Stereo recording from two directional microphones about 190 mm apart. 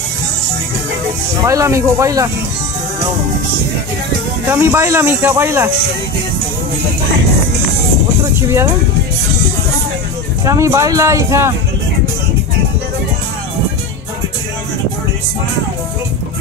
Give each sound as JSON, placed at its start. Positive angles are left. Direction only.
{"t": 1.4, "sound": "speech", "side_deg": -15}
{"t": 4.5, "sound": "speech", "side_deg": -10}
{"t": 8.4, "sound": "speech", "side_deg": -15}
{"t": 10.4, "sound": "speech", "side_deg": -15}